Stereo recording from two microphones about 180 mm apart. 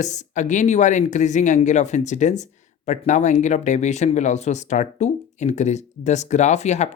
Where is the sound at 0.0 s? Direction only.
40° left (ahead or behind).